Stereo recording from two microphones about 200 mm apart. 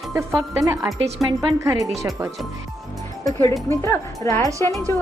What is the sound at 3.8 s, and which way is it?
Speech, 15° left (ahead or behind).